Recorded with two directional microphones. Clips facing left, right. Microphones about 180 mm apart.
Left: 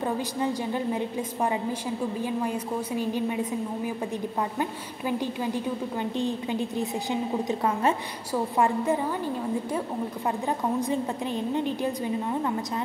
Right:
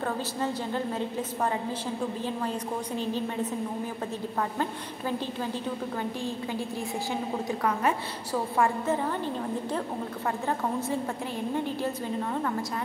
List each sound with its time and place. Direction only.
0.0 s a woman's voice: 15° left (ahead or behind)
8.3 s a woman's voice: 10° left (ahead or behind)
11.5 s a woman's voice: 15° left (ahead or behind)